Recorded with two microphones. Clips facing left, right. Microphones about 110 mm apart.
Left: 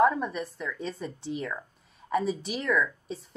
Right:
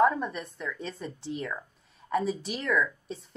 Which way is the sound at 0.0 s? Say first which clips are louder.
Left 1 dB; centre (ahead or behind).